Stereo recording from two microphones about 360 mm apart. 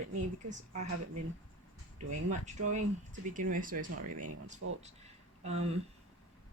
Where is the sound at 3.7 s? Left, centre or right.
Right.